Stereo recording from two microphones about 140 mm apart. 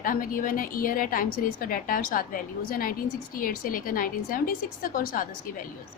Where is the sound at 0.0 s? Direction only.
85° left.